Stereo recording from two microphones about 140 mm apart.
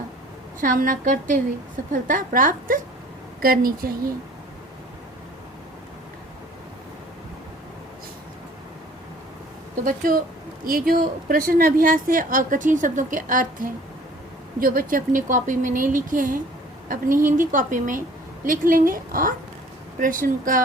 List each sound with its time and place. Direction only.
0.6 s a woman's voice: 75° right (ahead or behind)
3.4 s a woman's voice: 90° right
9.8 s a woman's voice: 80° right
14.6 s a woman's voice: 90° right; by 18.0 s 65° right (ahead or behind)
18.4 s a woman's voice: 80° right